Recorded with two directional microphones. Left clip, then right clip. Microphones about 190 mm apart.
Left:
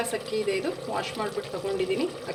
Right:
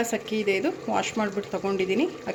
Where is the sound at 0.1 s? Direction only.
55° right (ahead or behind).